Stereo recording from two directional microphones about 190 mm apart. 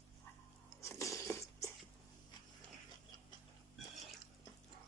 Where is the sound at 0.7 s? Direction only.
15° left (ahead or behind).